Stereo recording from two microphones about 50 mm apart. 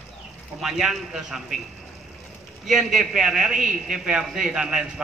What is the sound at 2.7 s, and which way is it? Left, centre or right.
A man's voice, centre.